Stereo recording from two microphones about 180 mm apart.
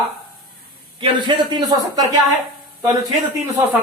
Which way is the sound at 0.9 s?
25° right (ahead or behind).